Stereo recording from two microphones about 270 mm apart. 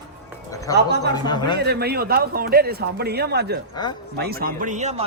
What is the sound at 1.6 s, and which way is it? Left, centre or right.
A man's voice, right.